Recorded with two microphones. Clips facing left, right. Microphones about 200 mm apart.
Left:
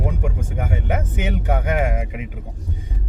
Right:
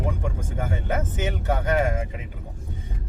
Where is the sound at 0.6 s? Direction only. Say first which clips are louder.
Left 2 dB; 15° left (ahead or behind).